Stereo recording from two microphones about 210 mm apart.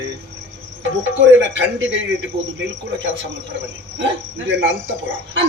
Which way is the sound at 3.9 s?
55° right (ahead or behind).